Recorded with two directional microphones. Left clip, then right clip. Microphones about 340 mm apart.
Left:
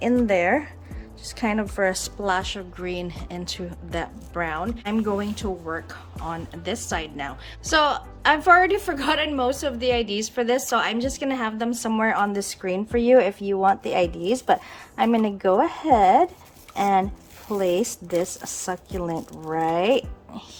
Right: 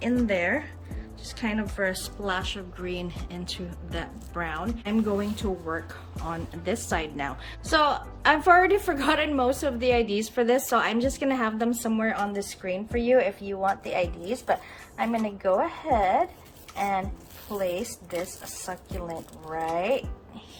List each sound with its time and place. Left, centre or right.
0.0 s a woman's voice: centre; by 17.6 s left
19.5 s speech: left